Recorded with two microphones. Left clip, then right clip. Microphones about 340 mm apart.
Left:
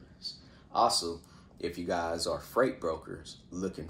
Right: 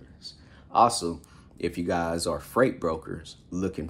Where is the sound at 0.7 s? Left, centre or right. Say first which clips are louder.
Right 6 dB; right.